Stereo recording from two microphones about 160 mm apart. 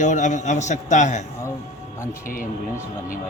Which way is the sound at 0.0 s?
50° left (ahead or behind).